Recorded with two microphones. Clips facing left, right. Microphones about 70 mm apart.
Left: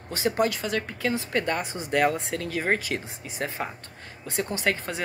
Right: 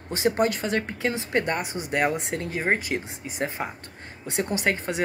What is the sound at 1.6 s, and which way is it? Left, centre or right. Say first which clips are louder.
Speech: left 1 dB; centre.